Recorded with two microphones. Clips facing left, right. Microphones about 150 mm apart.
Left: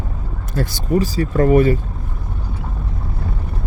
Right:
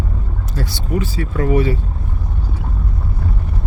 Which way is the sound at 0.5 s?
45° left (ahead or behind).